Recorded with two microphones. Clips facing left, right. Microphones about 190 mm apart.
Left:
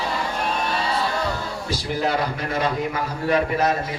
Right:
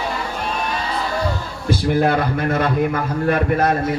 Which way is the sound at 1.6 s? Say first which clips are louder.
Right 8 dB; 55° right (ahead or behind).